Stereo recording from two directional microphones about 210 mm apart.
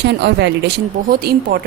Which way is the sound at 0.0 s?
55° right (ahead or behind).